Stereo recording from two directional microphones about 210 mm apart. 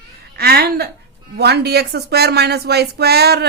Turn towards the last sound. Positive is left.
turn(degrees=-50)  # may be behind; listen again after turning